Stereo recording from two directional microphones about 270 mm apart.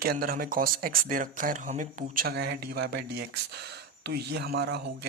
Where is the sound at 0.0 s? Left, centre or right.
Right.